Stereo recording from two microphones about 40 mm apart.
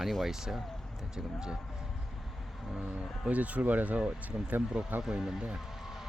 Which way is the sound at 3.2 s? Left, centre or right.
Right.